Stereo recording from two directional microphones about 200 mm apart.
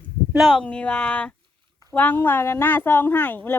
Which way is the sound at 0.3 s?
Centre (ahead or behind).